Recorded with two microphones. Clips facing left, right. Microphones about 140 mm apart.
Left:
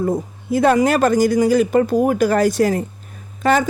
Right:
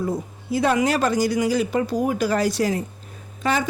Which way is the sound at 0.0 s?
50° left (ahead or behind).